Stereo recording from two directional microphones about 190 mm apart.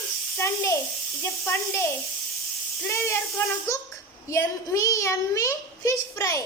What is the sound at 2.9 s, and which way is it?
Speech, 15° left (ahead or behind).